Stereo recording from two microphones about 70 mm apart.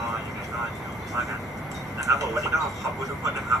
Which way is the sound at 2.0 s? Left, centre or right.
Right.